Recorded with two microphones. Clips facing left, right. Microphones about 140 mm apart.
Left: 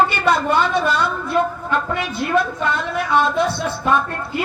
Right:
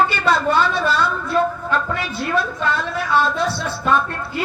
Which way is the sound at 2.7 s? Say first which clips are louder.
Even; 20° left (ahead or behind).